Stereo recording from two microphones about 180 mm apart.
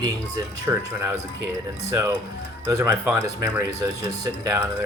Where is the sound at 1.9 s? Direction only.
20° right (ahead or behind).